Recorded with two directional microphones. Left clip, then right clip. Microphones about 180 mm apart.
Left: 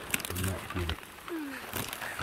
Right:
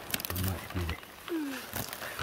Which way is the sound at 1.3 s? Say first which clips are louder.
Right 3 dB; 50° right (ahead or behind).